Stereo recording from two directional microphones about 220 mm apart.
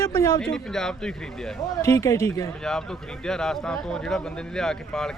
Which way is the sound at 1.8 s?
15° left (ahead or behind).